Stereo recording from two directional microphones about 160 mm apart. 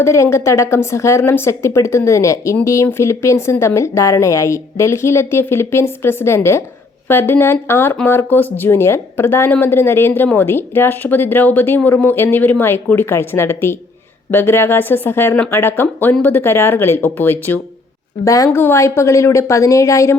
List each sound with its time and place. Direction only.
0.0 s a woman's voice: 15° left (ahead or behind)